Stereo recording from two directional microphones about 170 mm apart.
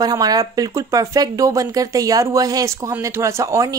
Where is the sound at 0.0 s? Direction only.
20° right (ahead or behind).